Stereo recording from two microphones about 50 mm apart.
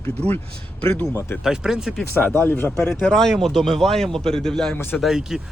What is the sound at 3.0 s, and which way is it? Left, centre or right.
Speech, centre.